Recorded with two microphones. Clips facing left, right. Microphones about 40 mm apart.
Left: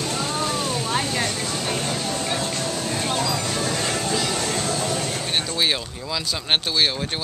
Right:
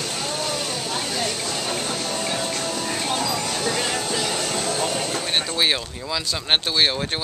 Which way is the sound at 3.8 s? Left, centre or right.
Right.